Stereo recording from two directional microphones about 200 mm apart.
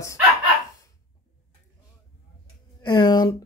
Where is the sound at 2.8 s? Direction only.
20° left (ahead or behind).